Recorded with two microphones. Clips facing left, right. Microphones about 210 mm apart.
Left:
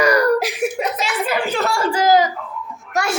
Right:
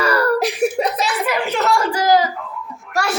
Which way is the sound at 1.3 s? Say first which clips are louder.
Right 2 dB; 30° left (ahead or behind).